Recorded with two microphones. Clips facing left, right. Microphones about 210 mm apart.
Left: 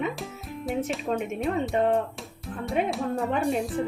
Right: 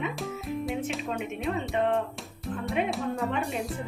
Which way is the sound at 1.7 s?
40° left (ahead or behind).